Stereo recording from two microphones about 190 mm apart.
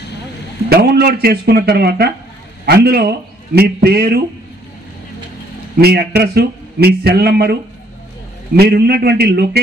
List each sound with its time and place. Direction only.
0.7 s a man's voice: 55° right (ahead or behind)
5.8 s a man's voice: 55° right (ahead or behind)
8.5 s a man's voice: 55° right (ahead or behind)